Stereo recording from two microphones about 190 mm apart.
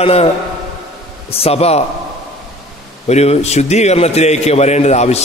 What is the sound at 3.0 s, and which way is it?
A man's voice, 35° left (ahead or behind).